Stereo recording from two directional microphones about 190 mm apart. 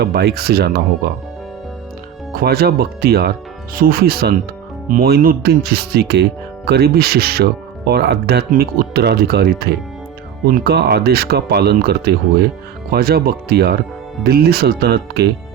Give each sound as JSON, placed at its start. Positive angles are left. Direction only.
{"t": 0.0, "sound": "speech", "side_deg": -60}
{"t": 2.3, "sound": "speech", "side_deg": -55}